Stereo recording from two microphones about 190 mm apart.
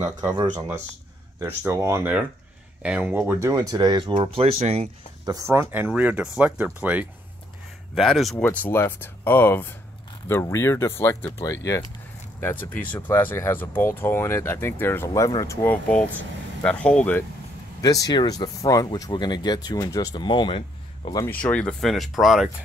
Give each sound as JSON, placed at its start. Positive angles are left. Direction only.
{"t": 1.4, "sound": "speech", "side_deg": -15}
{"t": 5.2, "sound": "speech", "side_deg": -15}
{"t": 17.8, "sound": "speech", "side_deg": 20}
{"t": 21.3, "sound": "speech", "side_deg": 5}